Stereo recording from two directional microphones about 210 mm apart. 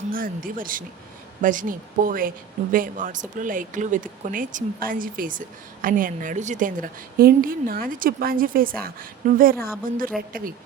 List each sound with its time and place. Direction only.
0.1 s a woman's voice: 40° right (ahead or behind)